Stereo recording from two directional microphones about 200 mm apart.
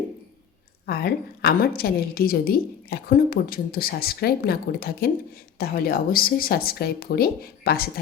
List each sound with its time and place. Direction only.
0.9 s a woman's voice: 50° left (ahead or behind)